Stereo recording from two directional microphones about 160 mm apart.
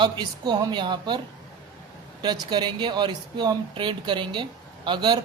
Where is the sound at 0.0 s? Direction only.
25° right (ahead or behind).